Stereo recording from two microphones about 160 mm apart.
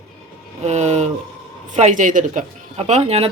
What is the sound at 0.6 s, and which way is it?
Speech, 45° right (ahead or behind).